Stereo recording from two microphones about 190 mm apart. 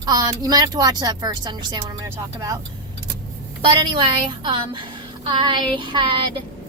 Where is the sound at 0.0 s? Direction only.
20° right (ahead or behind).